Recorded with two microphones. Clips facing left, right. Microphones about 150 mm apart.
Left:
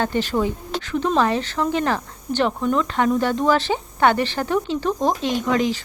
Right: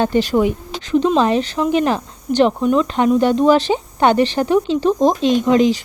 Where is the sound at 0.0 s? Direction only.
15° right (ahead or behind).